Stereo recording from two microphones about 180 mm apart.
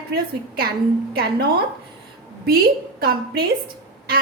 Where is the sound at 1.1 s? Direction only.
60° right (ahead or behind).